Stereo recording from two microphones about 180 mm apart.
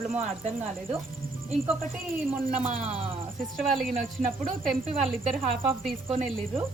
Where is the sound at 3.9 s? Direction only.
50° right (ahead or behind).